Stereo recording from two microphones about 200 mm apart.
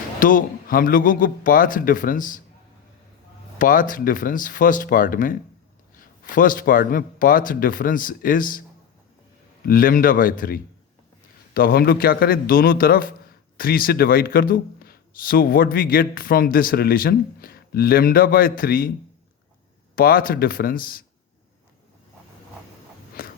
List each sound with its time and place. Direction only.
0.2 s speech: 40° left (ahead or behind)
3.6 s speech: 40° left (ahead or behind)
9.6 s speech: 45° left (ahead or behind)
20.0 s speech: 45° left (ahead or behind)
23.2 s walk: 45° left (ahead or behind)